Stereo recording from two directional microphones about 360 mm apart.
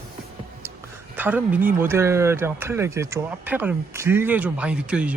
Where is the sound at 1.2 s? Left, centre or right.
Centre.